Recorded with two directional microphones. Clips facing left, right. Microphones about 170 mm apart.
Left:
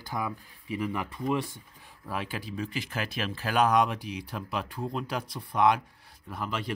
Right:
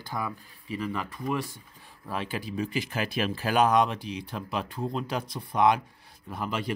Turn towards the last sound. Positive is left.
turn(degrees=0)  # may be behind; listen again after turning